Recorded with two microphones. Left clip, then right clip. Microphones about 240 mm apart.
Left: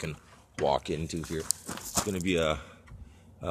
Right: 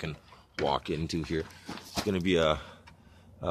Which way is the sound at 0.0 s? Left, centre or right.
Centre.